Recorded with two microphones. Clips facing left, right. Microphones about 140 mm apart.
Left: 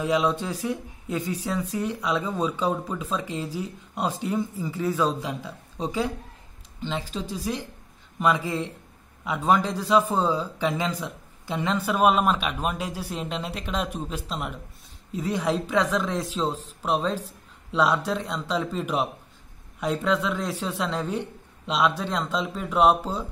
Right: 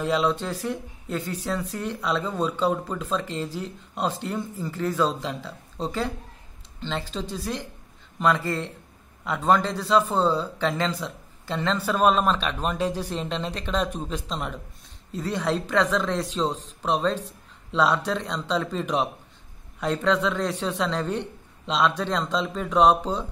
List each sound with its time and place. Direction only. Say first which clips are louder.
0.0 s a man's voice: even; 10° left (ahead or behind)